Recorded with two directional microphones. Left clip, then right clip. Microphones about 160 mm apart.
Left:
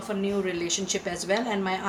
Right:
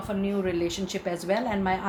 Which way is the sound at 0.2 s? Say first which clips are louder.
Right 1 dB; 40° right (ahead or behind).